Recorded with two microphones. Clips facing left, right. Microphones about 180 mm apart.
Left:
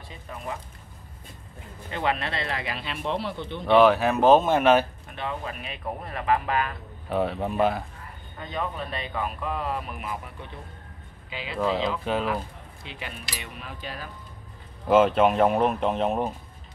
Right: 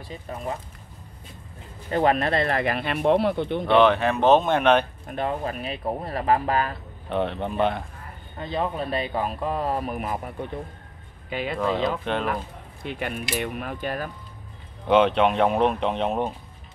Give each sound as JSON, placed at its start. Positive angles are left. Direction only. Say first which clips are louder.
{"t": 0.1, "sound": "speech", "louder": "right 4 dB", "side_deg": -35}
{"t": 1.9, "sound": "speech", "louder": "right 7 dB", "side_deg": -45}
{"t": 3.7, "sound": "speech", "louder": "left 1 dB", "side_deg": 5}
{"t": 5.0, "sound": "speech", "louder": "right 6 dB", "side_deg": -45}
{"t": 7.1, "sound": "speech", "louder": "even", "side_deg": 0}
{"t": 8.4, "sound": "speech", "louder": "right 5 dB", "side_deg": -35}
{"t": 12.0, "sound": "speech", "louder": "even", "side_deg": 5}
{"t": 12.8, "sound": "speech", "louder": "right 9 dB", "side_deg": -55}
{"t": 14.9, "sound": "speech", "louder": "even", "side_deg": 0}